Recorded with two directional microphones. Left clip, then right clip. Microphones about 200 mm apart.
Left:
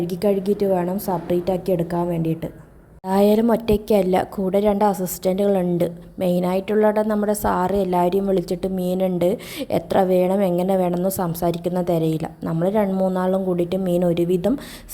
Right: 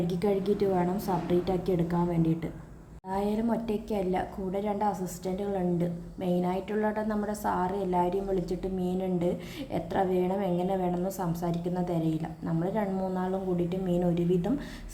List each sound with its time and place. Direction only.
0.1 s a woman's voice: 35° left (ahead or behind)
3.1 s a woman's voice: 50° left (ahead or behind)